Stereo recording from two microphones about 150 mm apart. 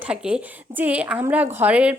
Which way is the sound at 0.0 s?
5° right (ahead or behind).